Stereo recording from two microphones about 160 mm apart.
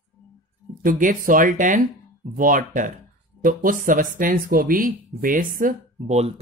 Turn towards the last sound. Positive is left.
turn(degrees=-60)  # may be behind; listen again after turning